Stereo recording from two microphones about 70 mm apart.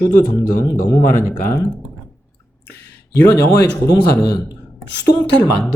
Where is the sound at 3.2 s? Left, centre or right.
Left.